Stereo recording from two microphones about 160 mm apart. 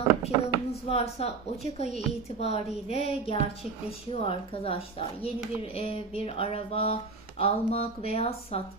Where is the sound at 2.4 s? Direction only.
40° left (ahead or behind).